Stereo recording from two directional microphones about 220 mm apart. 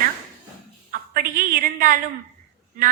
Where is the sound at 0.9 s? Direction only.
40° right (ahead or behind).